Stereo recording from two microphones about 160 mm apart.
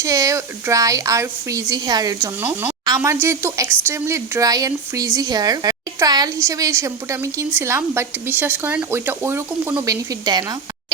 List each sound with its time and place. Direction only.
0.0 s speech: 20° right (ahead or behind)
2.4 s speech: 15° right (ahead or behind)